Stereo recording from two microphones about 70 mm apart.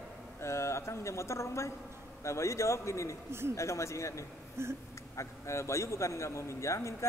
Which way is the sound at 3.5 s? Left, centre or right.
Left.